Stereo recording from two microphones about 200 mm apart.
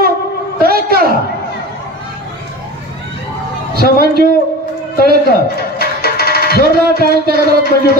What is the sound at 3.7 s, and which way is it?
Speech, 50° right (ahead or behind).